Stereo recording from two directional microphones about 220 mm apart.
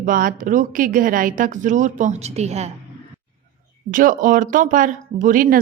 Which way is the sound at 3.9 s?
35° right (ahead or behind).